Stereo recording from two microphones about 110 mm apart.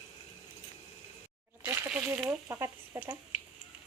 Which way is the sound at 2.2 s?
25° right (ahead or behind).